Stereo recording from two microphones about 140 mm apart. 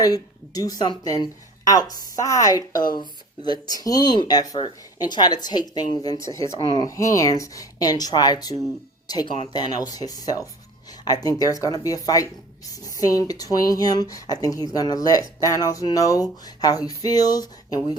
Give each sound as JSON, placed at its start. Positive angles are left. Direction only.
{"t": 0.0, "sound": "speech", "side_deg": 25}